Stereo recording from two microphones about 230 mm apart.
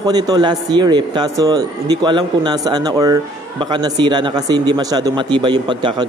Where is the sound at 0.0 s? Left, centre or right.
Centre.